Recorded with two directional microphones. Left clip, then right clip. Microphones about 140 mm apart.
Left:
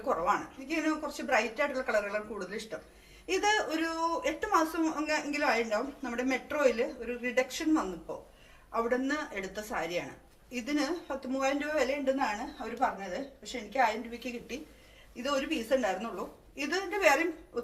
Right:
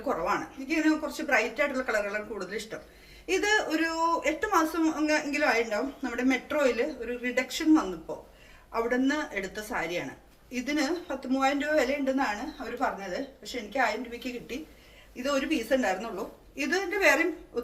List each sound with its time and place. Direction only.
0.3 s a man's voice: 25° right (ahead or behind)